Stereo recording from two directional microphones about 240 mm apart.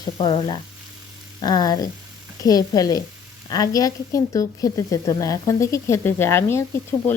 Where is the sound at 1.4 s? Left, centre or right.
Centre.